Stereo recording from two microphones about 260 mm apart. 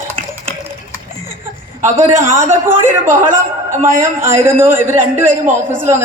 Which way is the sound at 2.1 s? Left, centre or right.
Centre.